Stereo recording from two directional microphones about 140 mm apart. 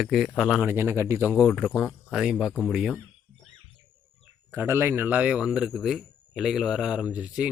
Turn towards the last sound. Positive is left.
turn(degrees=-10)  # may be behind; listen again after turning